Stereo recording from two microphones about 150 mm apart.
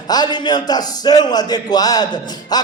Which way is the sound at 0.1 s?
30° left (ahead or behind).